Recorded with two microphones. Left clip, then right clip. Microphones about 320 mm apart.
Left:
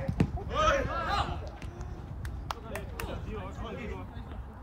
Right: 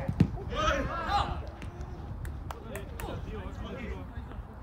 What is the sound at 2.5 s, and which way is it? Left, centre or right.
Run, centre.